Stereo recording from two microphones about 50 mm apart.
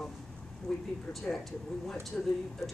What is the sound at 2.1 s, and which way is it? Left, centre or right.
Speech, left.